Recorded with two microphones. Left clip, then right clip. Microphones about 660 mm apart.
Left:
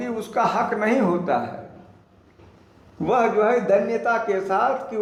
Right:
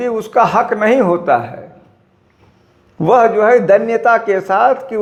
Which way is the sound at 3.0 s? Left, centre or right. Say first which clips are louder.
Right 9 dB; right.